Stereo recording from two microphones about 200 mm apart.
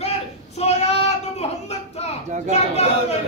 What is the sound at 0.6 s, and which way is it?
Child singing, 30° left (ahead or behind).